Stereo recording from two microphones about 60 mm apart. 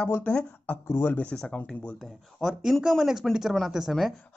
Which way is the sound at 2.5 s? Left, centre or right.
Centre.